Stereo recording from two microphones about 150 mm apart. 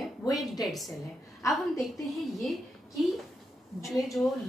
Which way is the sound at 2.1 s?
Centre (ahead or behind).